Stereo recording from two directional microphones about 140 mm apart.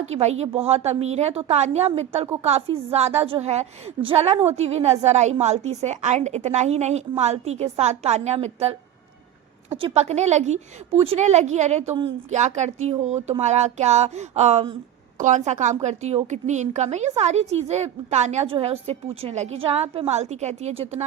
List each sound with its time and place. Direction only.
0.0 s a woman's voice: 50° right (ahead or behind)
9.7 s a woman's voice: 45° right (ahead or behind)